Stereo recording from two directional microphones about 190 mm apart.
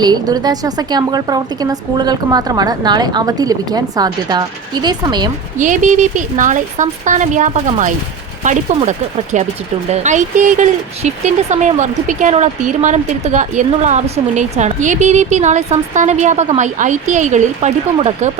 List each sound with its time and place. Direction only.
0.0 s a woman's voice: 20° right (ahead or behind)
5.5 s speech: 40° right (ahead or behind)